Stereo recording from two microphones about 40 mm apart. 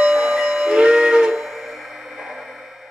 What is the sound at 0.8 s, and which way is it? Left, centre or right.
Music, centre.